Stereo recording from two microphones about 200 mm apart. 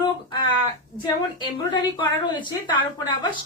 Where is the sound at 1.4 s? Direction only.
20° left (ahead or behind).